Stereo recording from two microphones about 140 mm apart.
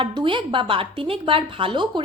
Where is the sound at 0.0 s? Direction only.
35° right (ahead or behind).